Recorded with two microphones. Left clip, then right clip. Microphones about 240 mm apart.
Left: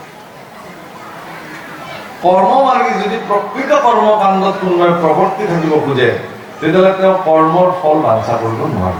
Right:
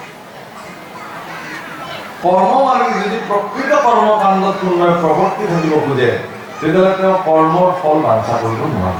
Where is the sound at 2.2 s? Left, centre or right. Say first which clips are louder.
Left 2 dB; centre.